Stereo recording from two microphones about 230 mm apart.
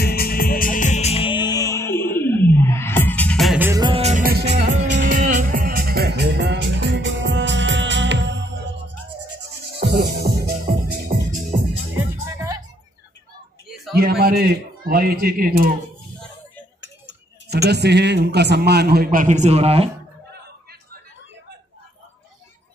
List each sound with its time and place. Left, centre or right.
0.0 s music: left; by 3.8 s centre
3.8 s music: right
5.0 s music: right
9.8 s music: right
12.3 s music: centre
13.9 s a man's voice: right
17.6 s a man's voice: right